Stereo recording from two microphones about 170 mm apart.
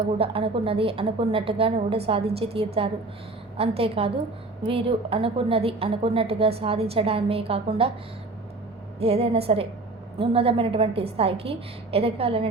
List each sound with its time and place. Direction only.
0.2 s a woman's voice: 35° right (ahead or behind)
9.0 s a woman's voice: 35° right (ahead or behind)